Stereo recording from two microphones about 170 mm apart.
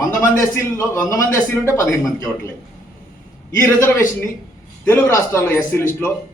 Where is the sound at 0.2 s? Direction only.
15° left (ahead or behind).